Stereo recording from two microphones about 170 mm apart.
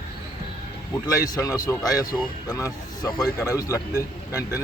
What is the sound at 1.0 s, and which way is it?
Speech, 20° left (ahead or behind).